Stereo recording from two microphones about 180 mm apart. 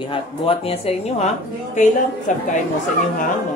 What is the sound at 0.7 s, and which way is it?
Speech, 35° left (ahead or behind).